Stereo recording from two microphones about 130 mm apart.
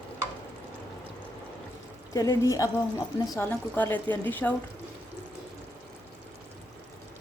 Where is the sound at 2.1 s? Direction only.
25° left (ahead or behind).